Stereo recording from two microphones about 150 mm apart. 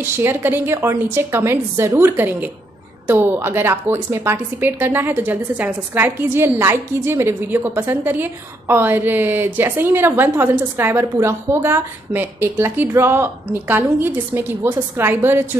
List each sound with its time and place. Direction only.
0.0 s a woman's voice: 15° right (ahead or behind)